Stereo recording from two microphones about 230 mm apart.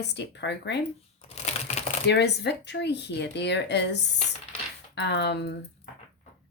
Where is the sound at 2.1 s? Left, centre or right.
Left.